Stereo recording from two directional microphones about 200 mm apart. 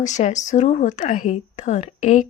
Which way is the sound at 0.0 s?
35° left (ahead or behind).